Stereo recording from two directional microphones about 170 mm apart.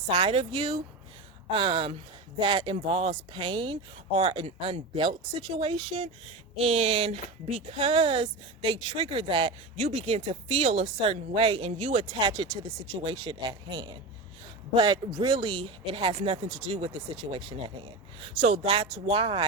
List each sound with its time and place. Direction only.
0.1 s speech: 35° right (ahead or behind)